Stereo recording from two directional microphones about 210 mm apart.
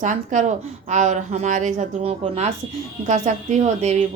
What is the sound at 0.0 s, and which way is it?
A woman's voice, 35° right (ahead or behind).